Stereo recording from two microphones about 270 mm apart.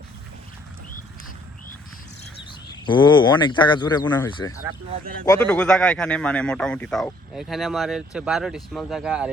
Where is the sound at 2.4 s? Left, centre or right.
Centre.